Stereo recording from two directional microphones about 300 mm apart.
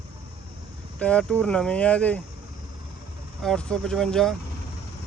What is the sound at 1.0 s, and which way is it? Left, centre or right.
Speech, centre.